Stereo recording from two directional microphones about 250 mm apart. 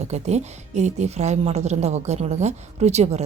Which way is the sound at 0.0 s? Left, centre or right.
Right.